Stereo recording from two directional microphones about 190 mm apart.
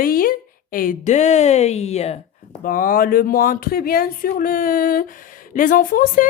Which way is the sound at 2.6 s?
45° left (ahead or behind).